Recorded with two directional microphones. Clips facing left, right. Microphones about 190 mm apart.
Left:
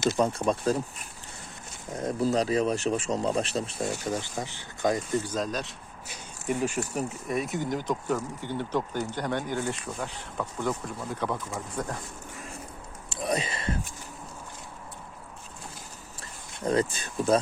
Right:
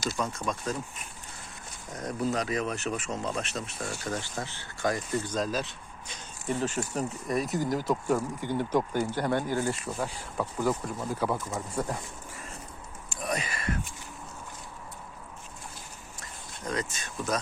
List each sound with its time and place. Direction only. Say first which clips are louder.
0.0 s speech: left 7 dB; 25° left (ahead or behind)
1.9 s speech: left 4 dB; 25° left (ahead or behind)
3.9 s speech: left 3 dB; 15° left (ahead or behind)
5.3 s speech: even; centre (ahead or behind)
6.1 s speech: left 2 dB; 10° left (ahead or behind); by 11.9 s 5° right (ahead or behind)
13.1 s speech: left 4 dB; 30° left (ahead or behind)
16.2 s speech: left 7 dB; 30° left (ahead or behind)